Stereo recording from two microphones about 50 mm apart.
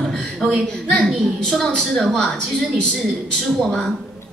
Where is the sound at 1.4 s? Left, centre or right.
Centre.